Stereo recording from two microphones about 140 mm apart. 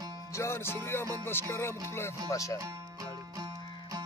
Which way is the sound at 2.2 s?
20° left (ahead or behind).